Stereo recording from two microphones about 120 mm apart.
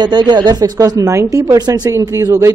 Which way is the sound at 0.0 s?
35° right (ahead or behind).